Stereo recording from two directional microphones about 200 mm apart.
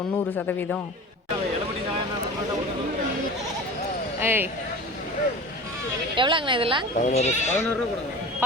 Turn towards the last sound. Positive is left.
turn(degrees=35)  # may be behind; listen again after turning